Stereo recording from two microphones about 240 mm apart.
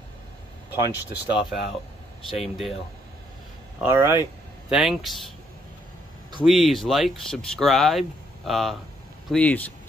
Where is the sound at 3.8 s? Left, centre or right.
Centre.